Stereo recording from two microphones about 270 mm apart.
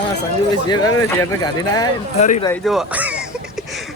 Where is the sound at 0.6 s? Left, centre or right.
Centre.